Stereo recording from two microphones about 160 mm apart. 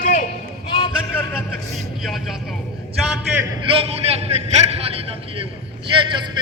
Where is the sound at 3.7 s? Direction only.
40° right (ahead or behind).